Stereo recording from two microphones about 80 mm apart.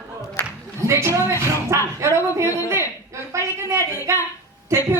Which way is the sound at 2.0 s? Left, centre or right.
Right.